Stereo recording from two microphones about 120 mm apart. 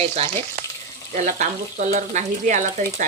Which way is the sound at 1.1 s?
90° right.